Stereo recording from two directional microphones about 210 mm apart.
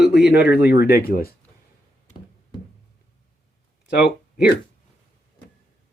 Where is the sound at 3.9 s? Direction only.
50° left (ahead or behind).